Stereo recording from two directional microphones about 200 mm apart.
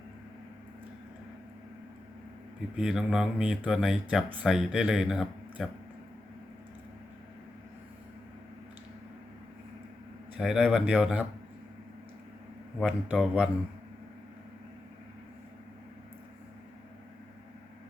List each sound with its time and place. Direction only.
2.7 s speech: 5° right (ahead or behind)
10.3 s speech: 5° right (ahead or behind)
12.8 s speech: 5° right (ahead or behind)